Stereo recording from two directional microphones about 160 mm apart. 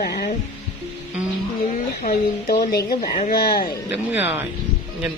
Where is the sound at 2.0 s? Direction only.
70° left (ahead or behind).